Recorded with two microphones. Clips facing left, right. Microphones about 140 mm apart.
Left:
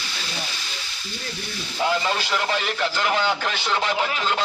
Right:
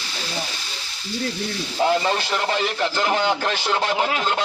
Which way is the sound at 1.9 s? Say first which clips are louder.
Right 3 dB; 30° right (ahead or behind).